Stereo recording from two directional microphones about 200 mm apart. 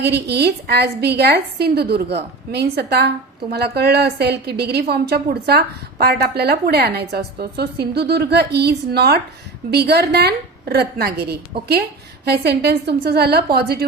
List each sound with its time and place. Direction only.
0.0 s a woman's voice: 55° right (ahead or behind)